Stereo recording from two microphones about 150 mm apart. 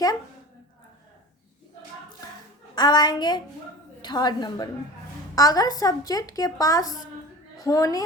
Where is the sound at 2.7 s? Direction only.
25° left (ahead or behind).